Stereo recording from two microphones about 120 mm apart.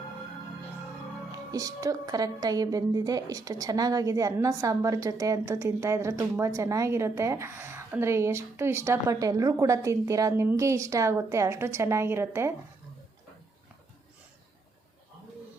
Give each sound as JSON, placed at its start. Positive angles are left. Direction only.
{"t": 1.5, "sound": "a woman's voice", "side_deg": -30}